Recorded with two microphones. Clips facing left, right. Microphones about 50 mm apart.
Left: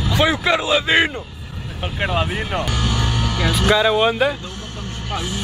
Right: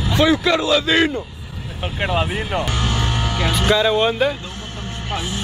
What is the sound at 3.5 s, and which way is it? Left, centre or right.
Groan, centre.